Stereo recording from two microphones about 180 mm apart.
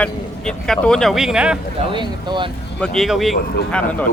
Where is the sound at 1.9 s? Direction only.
25° right (ahead or behind).